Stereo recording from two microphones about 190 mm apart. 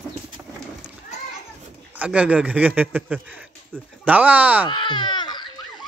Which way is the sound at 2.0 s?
5° right (ahead or behind).